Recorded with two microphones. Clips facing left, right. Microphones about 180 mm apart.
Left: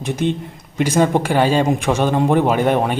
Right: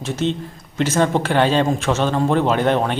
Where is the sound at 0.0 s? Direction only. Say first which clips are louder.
Left 2 dB; 15° left (ahead or behind).